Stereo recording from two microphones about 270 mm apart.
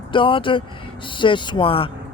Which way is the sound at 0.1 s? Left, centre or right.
Centre.